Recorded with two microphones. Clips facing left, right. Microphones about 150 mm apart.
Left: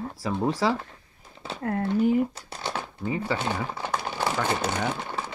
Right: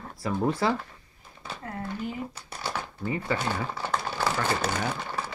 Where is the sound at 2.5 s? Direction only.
20° left (ahead or behind).